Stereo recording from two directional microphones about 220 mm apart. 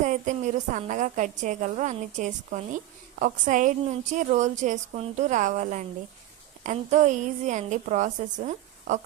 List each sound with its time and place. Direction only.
0.0 s a woman's voice: 35° right (ahead or behind)